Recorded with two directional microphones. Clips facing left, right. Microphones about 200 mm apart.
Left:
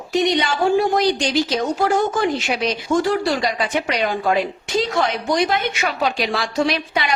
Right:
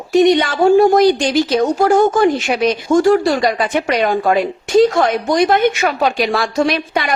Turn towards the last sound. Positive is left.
turn(degrees=-50)  # may be behind; listen again after turning